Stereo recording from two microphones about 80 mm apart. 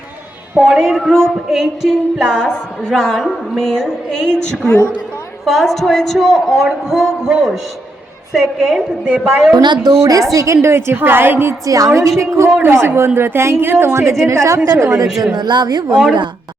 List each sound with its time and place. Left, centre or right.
0.6 s a woman's voice: centre
4.6 s a woman's voice: left
5.5 s a woman's voice: centre
9.5 s a woman's voice: right
11.6 s a woman's voice: right
15.4 s speech: right